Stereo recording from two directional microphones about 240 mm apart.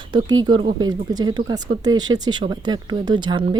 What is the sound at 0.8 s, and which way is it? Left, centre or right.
Speech, centre.